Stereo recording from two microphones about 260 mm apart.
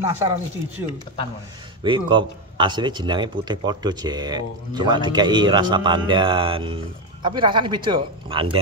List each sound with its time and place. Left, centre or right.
0.0 s speech: centre
1.8 s speech: centre